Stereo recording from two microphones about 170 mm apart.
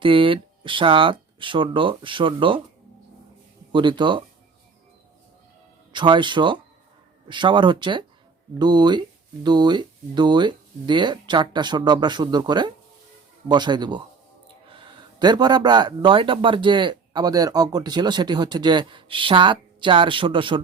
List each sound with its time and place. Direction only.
0.0 s speech: 30° right (ahead or behind)
3.7 s speech: 30° right (ahead or behind)
5.9 s speech: 25° right (ahead or behind)